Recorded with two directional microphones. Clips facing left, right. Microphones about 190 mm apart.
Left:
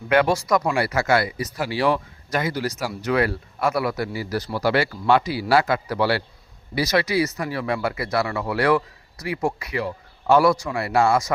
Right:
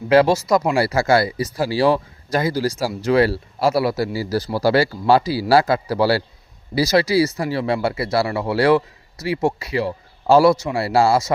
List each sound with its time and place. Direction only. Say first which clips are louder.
0.1 s a man's voice: right 4 dB; 30° right (ahead or behind)